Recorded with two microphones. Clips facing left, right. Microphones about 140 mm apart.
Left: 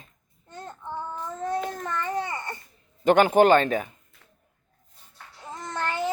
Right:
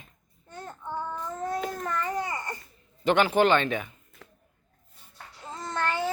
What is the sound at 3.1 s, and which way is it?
Speech, 45° left (ahead or behind).